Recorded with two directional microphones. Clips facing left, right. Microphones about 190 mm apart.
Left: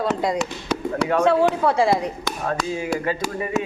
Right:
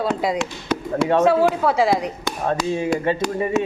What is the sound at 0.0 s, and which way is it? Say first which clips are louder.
A woman's voice: right 1 dB; centre (ahead or behind).